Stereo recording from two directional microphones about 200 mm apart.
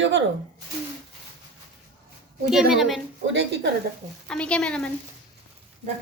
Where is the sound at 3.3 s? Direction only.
60° right (ahead or behind).